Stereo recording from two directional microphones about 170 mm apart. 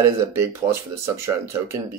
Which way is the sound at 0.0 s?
15° right (ahead or behind).